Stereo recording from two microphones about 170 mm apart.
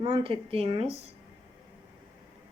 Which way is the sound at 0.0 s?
30° right (ahead or behind).